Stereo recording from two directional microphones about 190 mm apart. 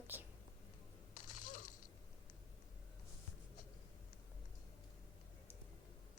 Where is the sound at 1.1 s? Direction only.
45° left (ahead or behind).